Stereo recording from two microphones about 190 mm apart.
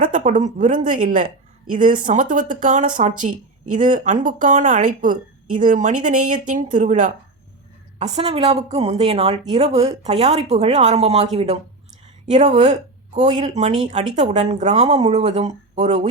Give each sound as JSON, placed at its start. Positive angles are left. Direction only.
{"t": 0.0, "sound": "speech", "side_deg": -40}